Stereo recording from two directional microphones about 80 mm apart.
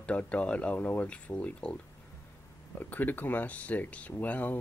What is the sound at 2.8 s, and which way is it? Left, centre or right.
Speech, left.